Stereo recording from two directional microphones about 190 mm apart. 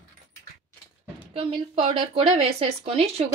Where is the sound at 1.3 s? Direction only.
30° right (ahead or behind).